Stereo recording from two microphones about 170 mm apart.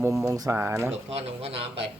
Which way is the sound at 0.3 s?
20° right (ahead or behind).